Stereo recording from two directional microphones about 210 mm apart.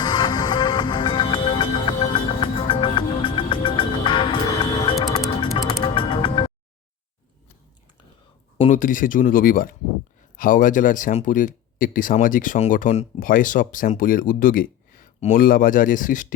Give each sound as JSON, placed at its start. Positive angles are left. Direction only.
{"t": 0.0, "sound": "music", "side_deg": 20}
{"t": 8.5, "sound": "a sound", "side_deg": 25}
{"t": 8.8, "sound": "speech", "side_deg": 40}